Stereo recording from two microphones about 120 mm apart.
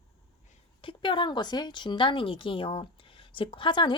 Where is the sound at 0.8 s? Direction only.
45° left (ahead or behind).